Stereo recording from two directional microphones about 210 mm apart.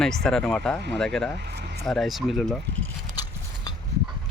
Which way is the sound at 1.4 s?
55° right (ahead or behind).